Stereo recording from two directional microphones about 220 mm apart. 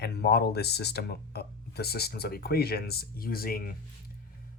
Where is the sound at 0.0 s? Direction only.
45° left (ahead or behind).